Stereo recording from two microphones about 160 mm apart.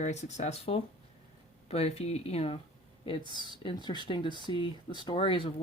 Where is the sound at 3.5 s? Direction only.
30° left (ahead or behind).